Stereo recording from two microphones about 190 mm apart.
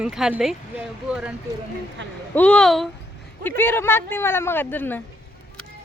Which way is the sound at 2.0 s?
75° right (ahead or behind).